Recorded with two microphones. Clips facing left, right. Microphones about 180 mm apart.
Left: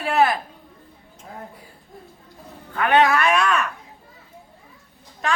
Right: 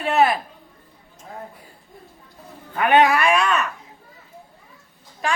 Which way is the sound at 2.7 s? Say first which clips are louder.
Right 1 dB; 15° right (ahead or behind).